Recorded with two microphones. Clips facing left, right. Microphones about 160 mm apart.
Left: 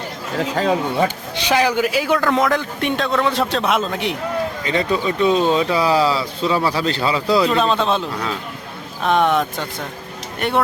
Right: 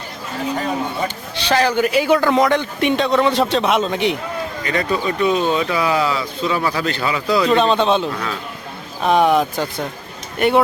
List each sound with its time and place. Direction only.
0.5 s speech: 90° left
1.4 s a man's voice: 15° left (ahead or behind)
4.6 s speech: 20° left (ahead or behind)
7.4 s a man's voice: centre (ahead or behind)